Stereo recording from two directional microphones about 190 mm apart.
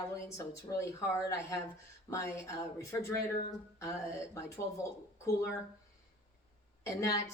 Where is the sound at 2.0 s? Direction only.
15° left (ahead or behind).